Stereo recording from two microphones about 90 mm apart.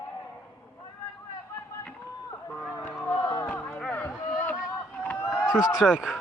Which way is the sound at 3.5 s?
15° left (ahead or behind).